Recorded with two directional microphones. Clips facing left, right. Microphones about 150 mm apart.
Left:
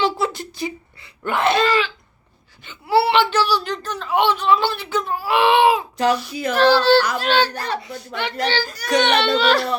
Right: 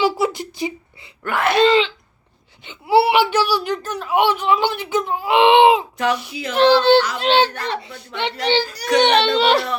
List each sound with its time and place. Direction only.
0.0 s a sound: 15° right (ahead or behind)
1.2 s wail: 25° left (ahead or behind)
1.5 s a child's voice: 20° right (ahead or behind)
2.6 s whimper: 20° right (ahead or behind)
6.3 s speech: 50° left (ahead or behind)
6.6 s a child's voice: 20° right (ahead or behind)